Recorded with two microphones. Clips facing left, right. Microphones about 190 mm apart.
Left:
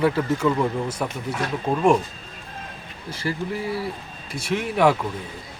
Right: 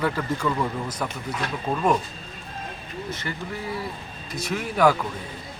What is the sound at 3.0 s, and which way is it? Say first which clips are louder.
Speech: left 5 dB; 30° left (ahead or behind).